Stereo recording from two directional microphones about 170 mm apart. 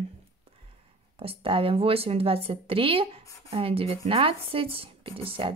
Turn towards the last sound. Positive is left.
turn(degrees=-30)  # may be behind; listen again after turning